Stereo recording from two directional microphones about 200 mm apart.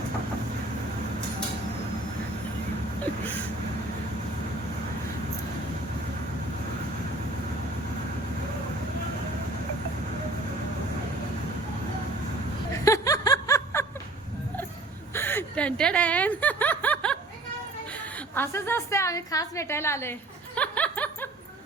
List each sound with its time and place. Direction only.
12.8 s snicker: 15° left (ahead or behind)
15.1 s snicker: 10° left (ahead or behind)
17.9 s a woman's voice: 10° left (ahead or behind)
20.6 s snicker: 5° left (ahead or behind)